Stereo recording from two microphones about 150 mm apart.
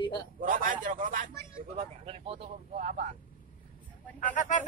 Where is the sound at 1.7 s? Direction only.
40° right (ahead or behind).